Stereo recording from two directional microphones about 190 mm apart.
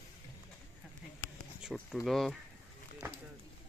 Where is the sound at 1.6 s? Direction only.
Centre (ahead or behind).